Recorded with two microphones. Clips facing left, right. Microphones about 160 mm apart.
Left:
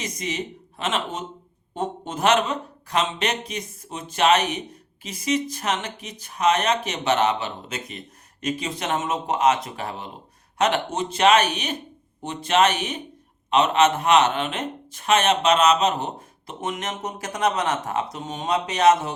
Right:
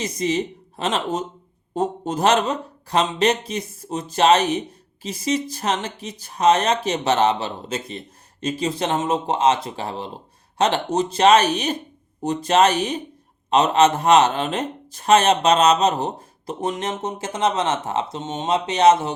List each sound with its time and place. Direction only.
0.2 s speech: 30° right (ahead or behind)